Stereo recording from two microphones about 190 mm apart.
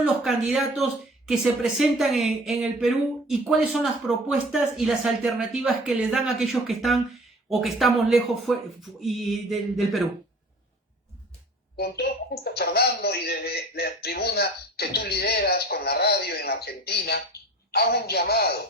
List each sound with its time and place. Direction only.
0.0 s speech: centre (ahead or behind)
11.8 s a man's voice: 55° left (ahead or behind)